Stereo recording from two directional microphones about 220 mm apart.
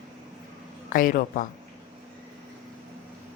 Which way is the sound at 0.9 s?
40° left (ahead or behind).